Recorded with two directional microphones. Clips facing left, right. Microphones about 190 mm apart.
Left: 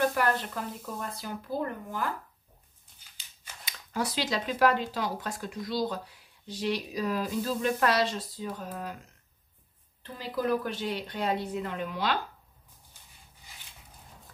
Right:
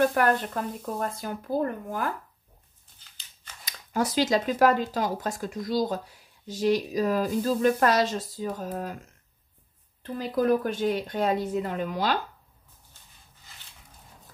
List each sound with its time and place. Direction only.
0.1 s speech: 50° right (ahead or behind)
3.6 s speech: 45° right (ahead or behind)
10.1 s speech: 45° right (ahead or behind)